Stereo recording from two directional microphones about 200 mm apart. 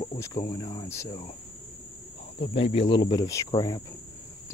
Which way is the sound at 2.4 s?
30° left (ahead or behind).